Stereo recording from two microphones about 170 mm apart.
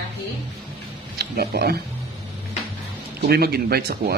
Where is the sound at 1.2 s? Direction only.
65° right (ahead or behind).